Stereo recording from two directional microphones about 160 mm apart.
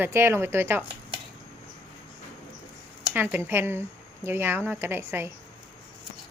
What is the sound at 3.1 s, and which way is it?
Speech, 10° right (ahead or behind).